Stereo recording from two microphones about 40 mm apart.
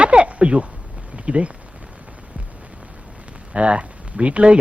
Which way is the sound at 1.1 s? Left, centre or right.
Right.